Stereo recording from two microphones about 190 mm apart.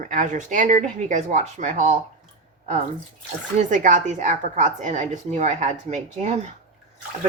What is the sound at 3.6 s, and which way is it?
Speech, 40° right (ahead or behind).